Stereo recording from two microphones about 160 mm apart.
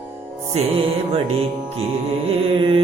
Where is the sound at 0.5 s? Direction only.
45° right (ahead or behind).